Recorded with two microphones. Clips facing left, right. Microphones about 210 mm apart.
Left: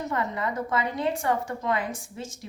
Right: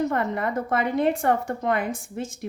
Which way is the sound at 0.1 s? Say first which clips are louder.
Right 4 dB; 55° right (ahead or behind).